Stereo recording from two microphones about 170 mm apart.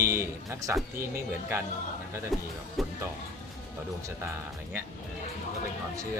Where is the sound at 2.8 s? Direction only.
Centre (ahead or behind).